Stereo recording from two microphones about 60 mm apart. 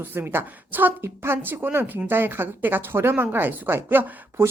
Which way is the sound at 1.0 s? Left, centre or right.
Right.